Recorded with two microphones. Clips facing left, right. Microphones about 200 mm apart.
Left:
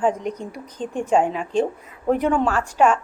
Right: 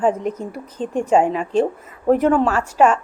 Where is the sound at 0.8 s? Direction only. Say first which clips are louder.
Right 4 dB; 35° right (ahead or behind).